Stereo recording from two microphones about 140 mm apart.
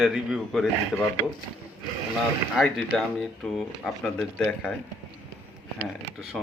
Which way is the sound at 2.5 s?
Centre (ahead or behind).